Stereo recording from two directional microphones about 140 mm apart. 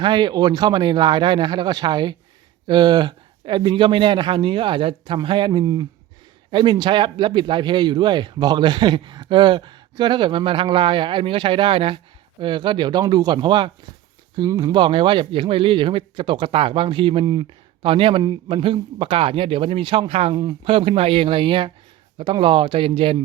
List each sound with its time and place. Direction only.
0.0 s speech: 35° right (ahead or behind)
20.3 s speech: 30° right (ahead or behind)